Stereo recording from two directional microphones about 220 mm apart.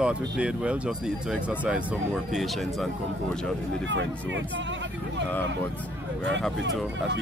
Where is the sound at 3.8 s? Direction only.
55° right (ahead or behind).